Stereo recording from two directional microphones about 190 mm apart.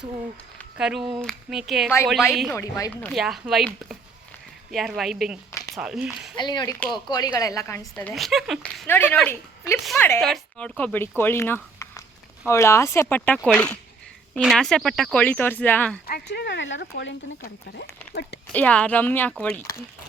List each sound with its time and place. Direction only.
0.8 s speech: centre (ahead or behind)
2.5 s speech: 15° left (ahead or behind)
3.2 s speech: centre (ahead or behind)
6.3 s speech: 25° left (ahead or behind); by 8.9 s centre (ahead or behind)
8.9 s a woman's voice: 10° left (ahead or behind)
10.2 s speech: centre (ahead or behind)
16.0 s speech: 55° left (ahead or behind); by 17.2 s 70° left (ahead or behind)
17.4 s speech: 60° left (ahead or behind)
18.5 s speech: 5° left (ahead or behind)